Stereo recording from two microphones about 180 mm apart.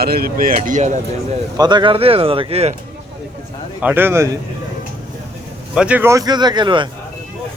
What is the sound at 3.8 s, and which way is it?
Speech, 10° right (ahead or behind).